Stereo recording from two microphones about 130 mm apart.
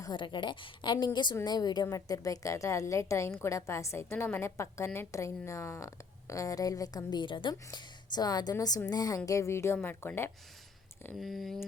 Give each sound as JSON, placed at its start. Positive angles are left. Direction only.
{"t": 0.0, "sound": "a woman's voice", "side_deg": 35}
{"t": 11.2, "sound": "speech", "side_deg": 0}